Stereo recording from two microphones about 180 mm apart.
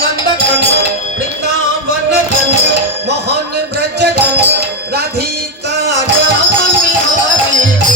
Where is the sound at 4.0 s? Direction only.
65° right (ahead or behind).